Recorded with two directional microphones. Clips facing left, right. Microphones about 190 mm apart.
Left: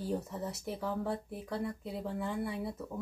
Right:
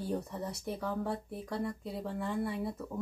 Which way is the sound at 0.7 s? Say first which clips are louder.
Even; 25° left (ahead or behind).